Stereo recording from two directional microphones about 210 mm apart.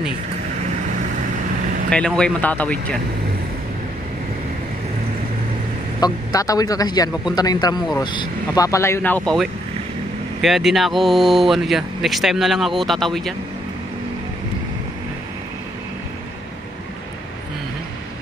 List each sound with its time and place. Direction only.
1.9 s speech: 5° left (ahead or behind)
5.9 s speech: 15° left (ahead or behind); by 13.3 s centre (ahead or behind)